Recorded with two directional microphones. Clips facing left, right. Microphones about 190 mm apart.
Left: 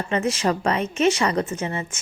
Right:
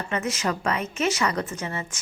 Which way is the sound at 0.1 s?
30° left (ahead or behind).